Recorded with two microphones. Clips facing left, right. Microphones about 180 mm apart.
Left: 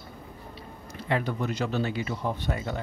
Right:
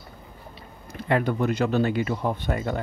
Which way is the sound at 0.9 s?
55° right (ahead or behind).